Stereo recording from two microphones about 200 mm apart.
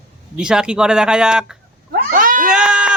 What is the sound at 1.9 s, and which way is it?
Cat, 45° right (ahead or behind).